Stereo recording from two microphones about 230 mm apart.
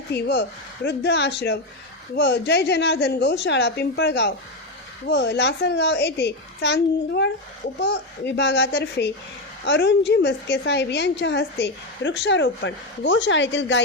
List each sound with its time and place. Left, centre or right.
0.1 s a woman's voice: left